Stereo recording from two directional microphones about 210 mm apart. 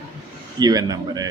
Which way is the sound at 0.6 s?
20° right (ahead or behind).